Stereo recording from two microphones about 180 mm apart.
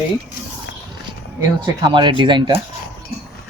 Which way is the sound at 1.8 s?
25° right (ahead or behind).